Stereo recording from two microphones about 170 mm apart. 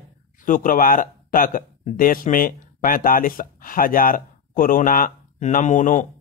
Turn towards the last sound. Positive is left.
turn(degrees=50)  # may be behind; listen again after turning